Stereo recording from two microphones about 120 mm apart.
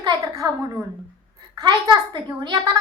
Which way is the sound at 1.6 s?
40° right (ahead or behind).